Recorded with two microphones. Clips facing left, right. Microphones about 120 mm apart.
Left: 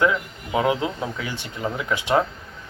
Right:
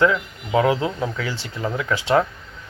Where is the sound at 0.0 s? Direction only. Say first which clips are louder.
Right 2 dB; 20° left (ahead or behind).